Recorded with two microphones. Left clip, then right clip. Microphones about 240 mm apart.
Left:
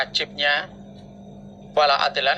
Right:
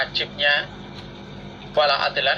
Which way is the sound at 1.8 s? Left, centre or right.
Left.